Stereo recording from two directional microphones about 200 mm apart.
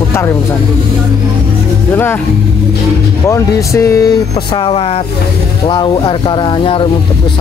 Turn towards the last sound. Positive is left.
turn(degrees=25)  # may be behind; listen again after turning